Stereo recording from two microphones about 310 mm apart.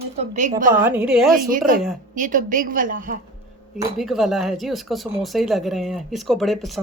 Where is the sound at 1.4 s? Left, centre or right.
Right.